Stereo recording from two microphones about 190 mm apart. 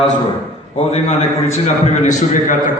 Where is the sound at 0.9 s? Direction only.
35° left (ahead or behind).